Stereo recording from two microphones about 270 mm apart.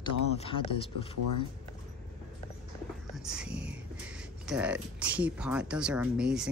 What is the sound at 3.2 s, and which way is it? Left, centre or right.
Speech, centre.